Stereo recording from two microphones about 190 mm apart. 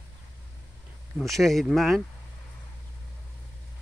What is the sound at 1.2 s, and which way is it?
Speech, centre (ahead or behind).